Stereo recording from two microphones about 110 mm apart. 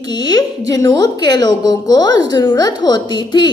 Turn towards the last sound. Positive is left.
turn(degrees=45)  # may be behind; listen again after turning